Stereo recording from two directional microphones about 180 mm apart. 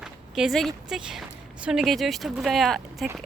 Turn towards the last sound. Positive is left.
turn(degrees=0)  # may be behind; listen again after turning